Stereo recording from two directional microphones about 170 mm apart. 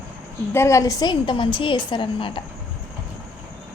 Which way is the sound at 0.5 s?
15° left (ahead or behind).